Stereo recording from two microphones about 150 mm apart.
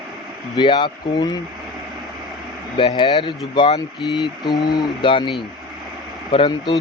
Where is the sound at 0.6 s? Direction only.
30° left (ahead or behind).